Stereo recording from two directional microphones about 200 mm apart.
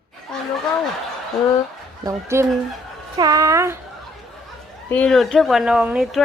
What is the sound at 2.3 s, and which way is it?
Speech, 15° right (ahead or behind).